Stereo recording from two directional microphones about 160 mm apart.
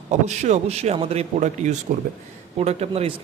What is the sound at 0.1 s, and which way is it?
A man's voice, 45° right (ahead or behind).